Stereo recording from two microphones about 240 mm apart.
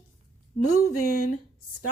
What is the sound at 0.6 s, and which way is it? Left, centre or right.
Speech, left.